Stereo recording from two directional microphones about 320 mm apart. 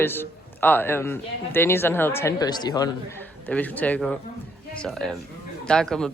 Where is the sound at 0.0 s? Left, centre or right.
Centre.